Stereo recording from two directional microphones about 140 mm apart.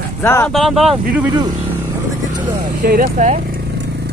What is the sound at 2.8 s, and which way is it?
Speech, 90° right.